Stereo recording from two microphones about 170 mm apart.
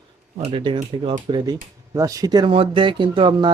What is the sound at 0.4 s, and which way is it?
Speech, 30° right (ahead or behind).